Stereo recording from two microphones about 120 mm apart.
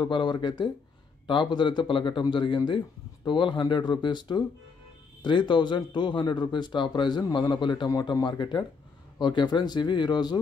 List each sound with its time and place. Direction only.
0.0 s a man's voice: 40° left (ahead or behind)